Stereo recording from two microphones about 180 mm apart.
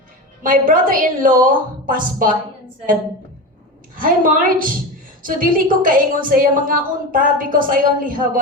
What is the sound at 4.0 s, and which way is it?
A woman's voice, 50° right (ahead or behind).